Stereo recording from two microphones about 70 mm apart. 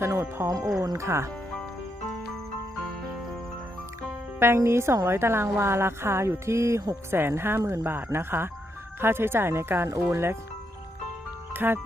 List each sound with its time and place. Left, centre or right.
0.0 s speech: right
4.4 s speech: right
11.5 s speech: right